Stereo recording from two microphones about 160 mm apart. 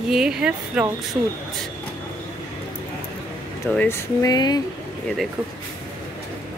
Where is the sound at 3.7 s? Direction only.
10° left (ahead or behind).